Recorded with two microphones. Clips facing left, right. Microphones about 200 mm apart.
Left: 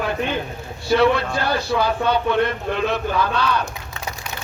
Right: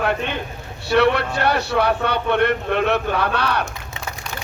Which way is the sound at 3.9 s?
20° right (ahead or behind).